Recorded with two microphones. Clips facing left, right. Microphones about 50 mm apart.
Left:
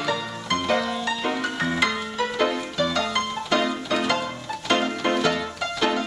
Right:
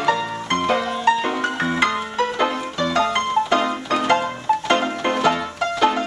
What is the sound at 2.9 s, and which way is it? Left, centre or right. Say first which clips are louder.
Music: right 7 dB; right.